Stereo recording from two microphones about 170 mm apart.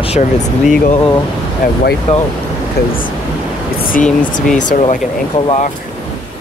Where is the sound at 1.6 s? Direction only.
50° left (ahead or behind).